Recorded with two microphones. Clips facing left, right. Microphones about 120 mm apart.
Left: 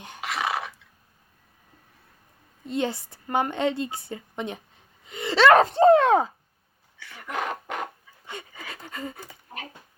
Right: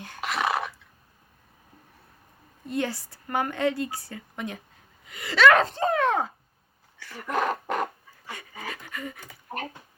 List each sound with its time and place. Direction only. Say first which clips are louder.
0.2 s dog: right 2 dB; 55° right (ahead or behind)
2.6 s a woman's voice: left 2 dB; 20° left (ahead or behind)
7.0 s a sound: right 4 dB; 45° right (ahead or behind)
8.7 s pant: left 1 dB; 30° left (ahead or behind)